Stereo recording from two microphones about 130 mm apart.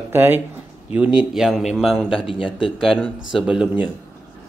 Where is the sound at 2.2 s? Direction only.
45° left (ahead or behind).